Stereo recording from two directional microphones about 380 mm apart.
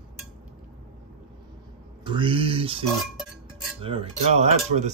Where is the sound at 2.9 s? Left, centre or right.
Centre.